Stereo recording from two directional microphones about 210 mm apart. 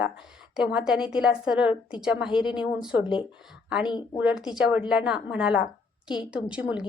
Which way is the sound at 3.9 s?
20° left (ahead or behind).